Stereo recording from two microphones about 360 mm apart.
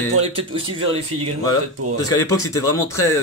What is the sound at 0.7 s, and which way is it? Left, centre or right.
Speech, centre.